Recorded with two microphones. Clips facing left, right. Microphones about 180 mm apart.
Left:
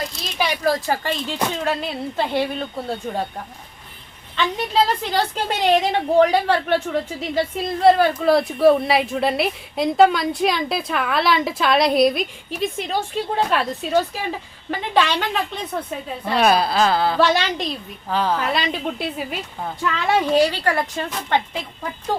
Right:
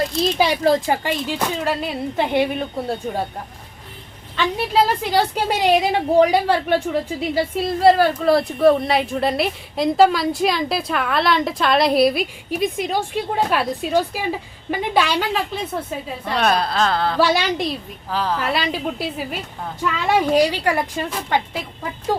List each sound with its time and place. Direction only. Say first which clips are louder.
0.3 s a woman's voice: right 2 dB; 25° right (ahead or behind)
4.4 s a woman's voice: right 1 dB; 10° right (ahead or behind)
17.2 s a woman's voice: right 1 dB; 10° right (ahead or behind)